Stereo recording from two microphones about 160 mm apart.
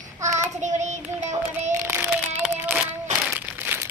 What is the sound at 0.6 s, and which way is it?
Child singing, 45° right (ahead or behind).